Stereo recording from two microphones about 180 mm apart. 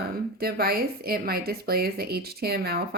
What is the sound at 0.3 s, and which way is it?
Speech, 60° right (ahead or behind).